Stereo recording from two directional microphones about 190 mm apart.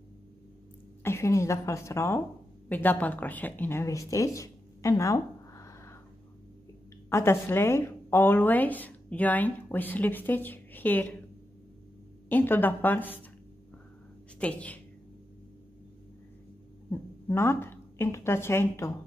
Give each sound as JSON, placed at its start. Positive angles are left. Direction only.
{"t": 1.0, "sound": "a woman's voice", "side_deg": 15}
{"t": 4.1, "sound": "a sound", "side_deg": 15}
{"t": 7.1, "sound": "a woman's voice", "side_deg": 10}
{"t": 12.3, "sound": "a woman's voice", "side_deg": 10}
{"t": 14.4, "sound": "a woman's voice", "side_deg": 5}
{"t": 16.9, "sound": "a woman's voice", "side_deg": 10}